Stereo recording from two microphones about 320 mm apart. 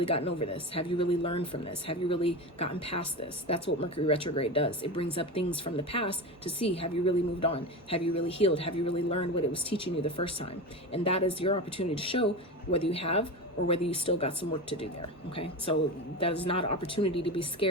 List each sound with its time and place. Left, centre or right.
0.1 s a woman's voice: centre
16.2 s a woman's voice: centre